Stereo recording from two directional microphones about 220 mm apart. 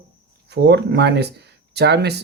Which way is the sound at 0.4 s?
50° right (ahead or behind).